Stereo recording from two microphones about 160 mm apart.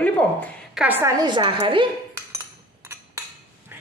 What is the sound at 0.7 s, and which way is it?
A woman's voice, 10° right (ahead or behind).